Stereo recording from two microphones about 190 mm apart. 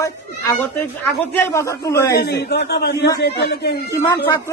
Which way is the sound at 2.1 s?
60° left (ahead or behind).